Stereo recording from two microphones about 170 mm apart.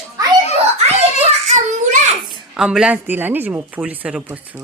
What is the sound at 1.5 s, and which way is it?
Child singing, 45° right (ahead or behind).